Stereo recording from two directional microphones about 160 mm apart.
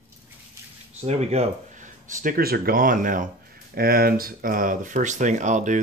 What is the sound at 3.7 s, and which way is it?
Speech, 70° right (ahead or behind).